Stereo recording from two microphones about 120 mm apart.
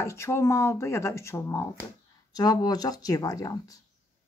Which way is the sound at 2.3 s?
35° left (ahead or behind).